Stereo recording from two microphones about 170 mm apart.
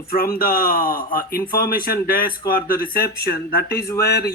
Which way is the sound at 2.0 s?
60° left (ahead or behind).